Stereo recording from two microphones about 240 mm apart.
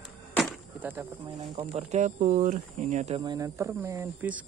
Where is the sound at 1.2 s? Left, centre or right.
Right.